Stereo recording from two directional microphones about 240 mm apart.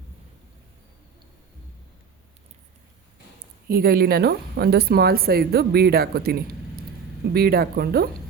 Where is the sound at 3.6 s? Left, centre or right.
Right.